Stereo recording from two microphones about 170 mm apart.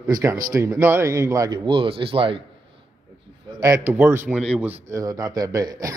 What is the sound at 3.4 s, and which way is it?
Speech, 20° right (ahead or behind).